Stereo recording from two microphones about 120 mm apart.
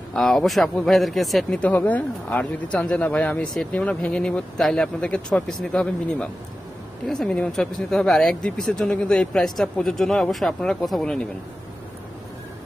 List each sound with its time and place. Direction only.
0.1 s speech: 5° left (ahead or behind)